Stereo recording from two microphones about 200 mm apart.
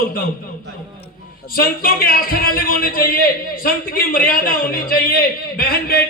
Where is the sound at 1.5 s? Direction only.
45° left (ahead or behind).